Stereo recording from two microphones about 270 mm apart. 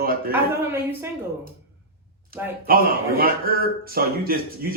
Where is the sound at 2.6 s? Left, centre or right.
Right.